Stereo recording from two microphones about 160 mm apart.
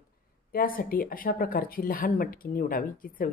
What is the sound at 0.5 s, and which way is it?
Speech, 65° left (ahead or behind).